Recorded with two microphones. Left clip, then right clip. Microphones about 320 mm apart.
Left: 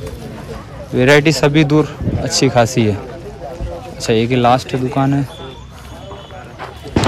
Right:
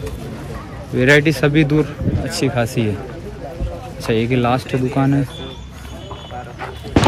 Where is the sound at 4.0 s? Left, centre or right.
Centre.